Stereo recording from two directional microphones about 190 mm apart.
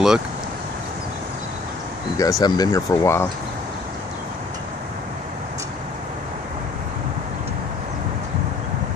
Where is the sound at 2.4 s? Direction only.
20° left (ahead or behind).